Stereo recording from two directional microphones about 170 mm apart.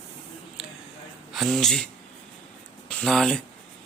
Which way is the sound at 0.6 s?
5° right (ahead or behind).